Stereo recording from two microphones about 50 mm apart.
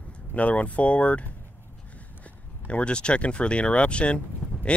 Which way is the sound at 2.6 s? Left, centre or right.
Left.